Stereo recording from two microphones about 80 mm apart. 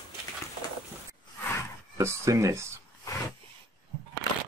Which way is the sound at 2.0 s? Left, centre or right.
Right.